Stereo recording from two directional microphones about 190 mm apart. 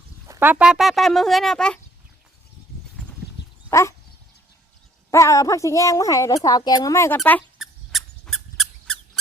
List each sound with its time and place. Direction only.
0.3 s speech: 10° right (ahead or behind)
3.7 s dog: 15° left (ahead or behind)
5.1 s a woman's voice: 15° left (ahead or behind)
7.6 s squeak: centre (ahead or behind)